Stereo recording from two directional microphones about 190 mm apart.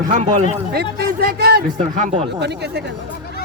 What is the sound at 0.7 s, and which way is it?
Speech, 55° right (ahead or behind).